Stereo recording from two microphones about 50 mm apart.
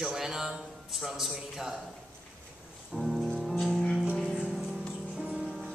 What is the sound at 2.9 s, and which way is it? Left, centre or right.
Music, centre.